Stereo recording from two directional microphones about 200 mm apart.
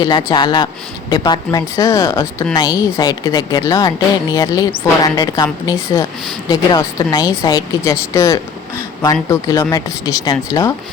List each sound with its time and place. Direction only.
0.0 s speech: 20° left (ahead or behind)